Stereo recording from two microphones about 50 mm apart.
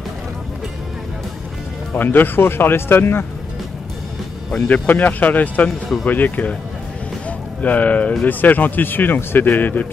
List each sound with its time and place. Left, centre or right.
2.0 s speech: left
4.6 s speech: left
7.2 s a sound: left
8.2 s speech: left